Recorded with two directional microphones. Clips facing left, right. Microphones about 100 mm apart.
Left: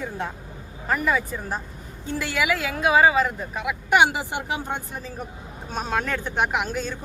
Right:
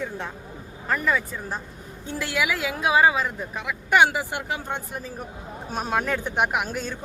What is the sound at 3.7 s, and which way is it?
Speech, 15° left (ahead or behind).